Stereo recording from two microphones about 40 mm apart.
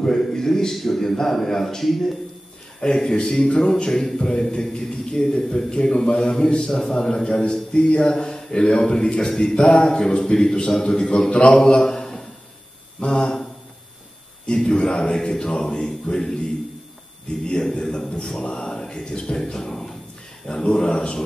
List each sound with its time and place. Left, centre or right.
0.0 s a man's voice: centre
2.8 s a man's voice: centre
13.0 s a sound: left
14.4 s a man's voice: left
17.5 s a man's voice: left